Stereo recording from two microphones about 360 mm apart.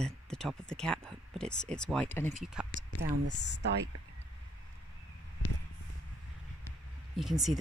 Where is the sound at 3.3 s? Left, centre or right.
Left.